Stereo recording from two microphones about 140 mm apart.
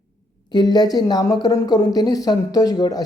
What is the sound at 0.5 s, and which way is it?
Speech, 30° left (ahead or behind).